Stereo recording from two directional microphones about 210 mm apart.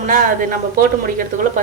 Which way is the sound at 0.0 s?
40° right (ahead or behind).